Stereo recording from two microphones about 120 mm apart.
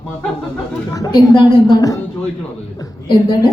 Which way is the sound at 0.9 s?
35° left (ahead or behind).